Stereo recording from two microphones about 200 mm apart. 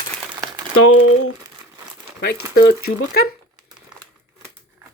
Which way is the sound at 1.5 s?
15° right (ahead or behind).